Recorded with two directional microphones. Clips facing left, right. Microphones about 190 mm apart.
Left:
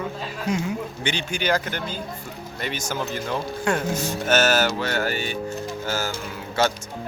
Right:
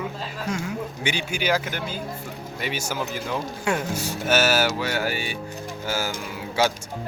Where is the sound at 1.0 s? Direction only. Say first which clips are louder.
Even; 10° right (ahead or behind).